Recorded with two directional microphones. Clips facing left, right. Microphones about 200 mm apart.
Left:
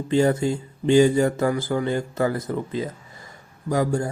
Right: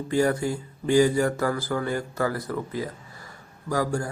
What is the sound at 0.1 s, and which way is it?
Speech, 25° left (ahead or behind).